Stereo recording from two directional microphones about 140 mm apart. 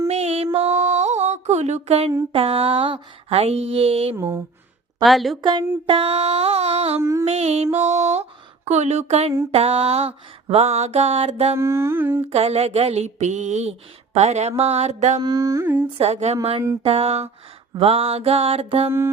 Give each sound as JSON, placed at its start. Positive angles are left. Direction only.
{"t": 0.1, "sound": "music", "side_deg": -50}
{"t": 2.3, "sound": "speech", "side_deg": -45}
{"t": 4.1, "sound": "mantra", "side_deg": -15}
{"t": 5.0, "sound": "a woman's voice", "side_deg": 0}
{"t": 5.4, "sound": "speech", "side_deg": -35}
{"t": 7.0, "sound": "carnatic music", "side_deg": -20}
{"t": 7.3, "sound": "speech", "side_deg": -50}
{"t": 11.5, "sound": "mantra", "side_deg": -20}
{"t": 12.3, "sound": "speech", "side_deg": -50}
{"t": 15.2, "sound": "carnatic music", "side_deg": -30}
{"t": 15.6, "sound": "mantra", "side_deg": -15}
{"t": 16.0, "sound": "speech", "side_deg": -50}
{"t": 18.9, "sound": "mantra", "side_deg": -15}